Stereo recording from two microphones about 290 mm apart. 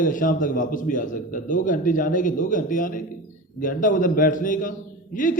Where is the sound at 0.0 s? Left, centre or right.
Left.